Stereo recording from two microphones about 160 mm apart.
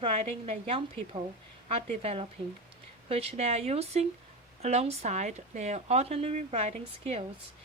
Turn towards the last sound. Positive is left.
turn(degrees=-40)  # may be behind; listen again after turning